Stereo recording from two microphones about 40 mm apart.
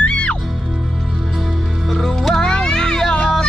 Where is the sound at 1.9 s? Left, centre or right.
Centre.